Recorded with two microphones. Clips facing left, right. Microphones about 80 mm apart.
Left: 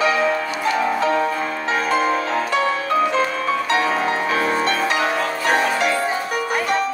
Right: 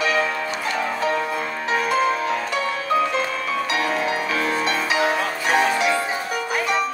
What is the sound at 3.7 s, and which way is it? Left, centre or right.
Music, left.